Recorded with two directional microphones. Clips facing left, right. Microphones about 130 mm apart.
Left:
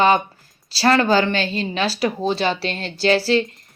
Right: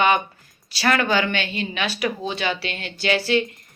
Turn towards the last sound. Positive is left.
turn(degrees=35)  # may be behind; listen again after turning